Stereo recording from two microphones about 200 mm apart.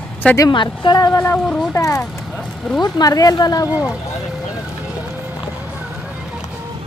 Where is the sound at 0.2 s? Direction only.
15° left (ahead or behind).